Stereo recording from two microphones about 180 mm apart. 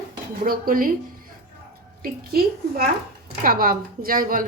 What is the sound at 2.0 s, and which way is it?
A woman's voice, 55° right (ahead or behind).